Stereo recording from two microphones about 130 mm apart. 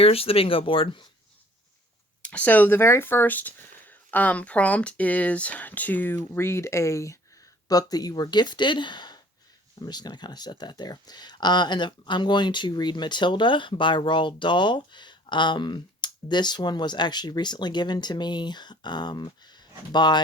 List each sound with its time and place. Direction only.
0.0 s speech: 50° left (ahead or behind)
2.3 s speech: 15° left (ahead or behind); by 20.2 s 35° left (ahead or behind)